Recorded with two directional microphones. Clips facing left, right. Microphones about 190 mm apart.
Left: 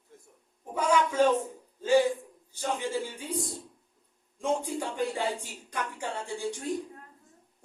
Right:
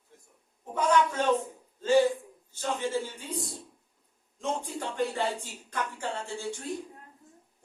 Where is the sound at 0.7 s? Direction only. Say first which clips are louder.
Right 1 dB; 10° left (ahead or behind).